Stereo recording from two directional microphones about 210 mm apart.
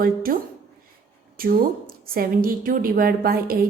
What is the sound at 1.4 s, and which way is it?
A woman's voice, 45° right (ahead or behind).